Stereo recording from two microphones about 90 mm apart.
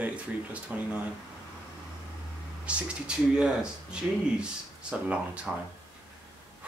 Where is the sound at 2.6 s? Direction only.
15° right (ahead or behind).